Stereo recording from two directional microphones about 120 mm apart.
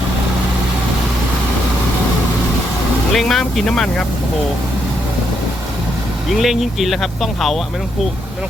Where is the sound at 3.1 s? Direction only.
Centre (ahead or behind).